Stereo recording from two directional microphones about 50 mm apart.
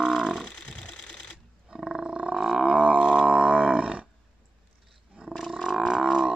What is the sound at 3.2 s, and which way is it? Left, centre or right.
Wild animals, right.